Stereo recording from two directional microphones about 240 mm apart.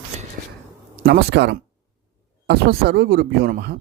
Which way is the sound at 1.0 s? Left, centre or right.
Right.